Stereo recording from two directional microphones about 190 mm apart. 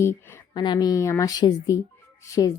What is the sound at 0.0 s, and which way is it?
A woman's voice, 10° left (ahead or behind).